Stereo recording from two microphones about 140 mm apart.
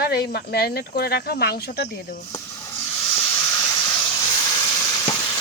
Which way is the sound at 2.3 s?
20° left (ahead or behind).